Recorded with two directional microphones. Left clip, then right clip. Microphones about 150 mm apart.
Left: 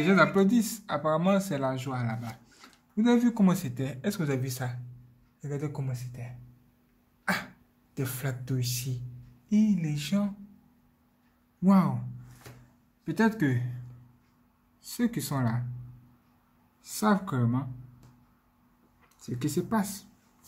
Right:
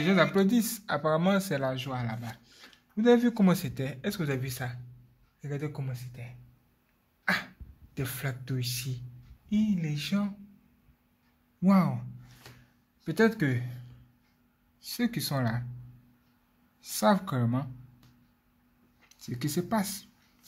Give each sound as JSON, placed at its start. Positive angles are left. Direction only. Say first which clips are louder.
{"t": 0.0, "sound": "speech", "louder": "left 2 dB", "side_deg": -25}
{"t": 3.9, "sound": "speech", "louder": "left 2 dB", "side_deg": -5}
{"t": 7.9, "sound": "speech", "louder": "left 1 dB", "side_deg": 0}
{"t": 11.6, "sound": "speech", "louder": "left 1 dB", "side_deg": -30}
{"t": 13.0, "sound": "speech", "louder": "right 1 dB", "side_deg": -40}
{"t": 14.9, "sound": "speech", "louder": "even", "side_deg": -35}
{"t": 16.8, "sound": "speech", "louder": "right 2 dB", "side_deg": -40}
{"t": 19.2, "sound": "speech", "louder": "left 2 dB", "side_deg": -35}